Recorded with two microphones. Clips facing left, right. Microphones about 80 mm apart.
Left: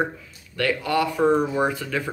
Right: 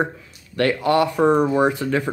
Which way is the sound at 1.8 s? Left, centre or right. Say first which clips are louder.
Right 6 dB; right.